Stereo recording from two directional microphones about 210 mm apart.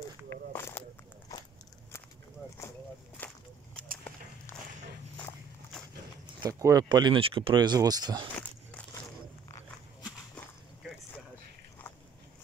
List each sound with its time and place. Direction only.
0.5 s a sound: 10° left (ahead or behind)
3.2 s walk: 5° left (ahead or behind)
5.2 s walk: 5° left (ahead or behind)
6.4 s speech: 15° right (ahead or behind)
8.4 s biting: 10° left (ahead or behind)